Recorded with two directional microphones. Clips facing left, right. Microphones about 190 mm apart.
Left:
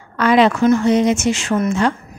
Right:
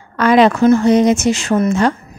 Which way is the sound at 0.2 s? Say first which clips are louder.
Right 3 dB; 45° right (ahead or behind).